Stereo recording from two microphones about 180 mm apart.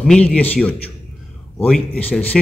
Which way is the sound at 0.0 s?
5° left (ahead or behind).